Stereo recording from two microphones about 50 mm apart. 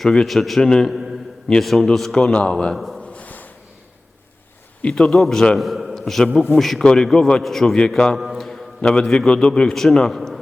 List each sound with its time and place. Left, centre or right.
0.0 s a man's voice: centre
0.3 s a man's voice: centre
0.6 s a man's voice: centre
0.9 s a sound: centre
1.5 s a man's voice: centre
2.7 s speech: centre
3.0 s a sound: left
4.8 s a man's voice: centre